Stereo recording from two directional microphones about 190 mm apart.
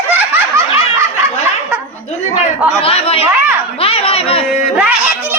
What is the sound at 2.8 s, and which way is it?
Speech, 30° left (ahead or behind).